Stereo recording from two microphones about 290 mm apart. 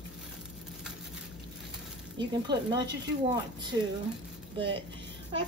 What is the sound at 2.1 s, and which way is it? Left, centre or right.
Speech, centre.